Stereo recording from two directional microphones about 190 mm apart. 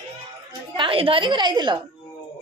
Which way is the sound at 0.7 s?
30° right (ahead or behind).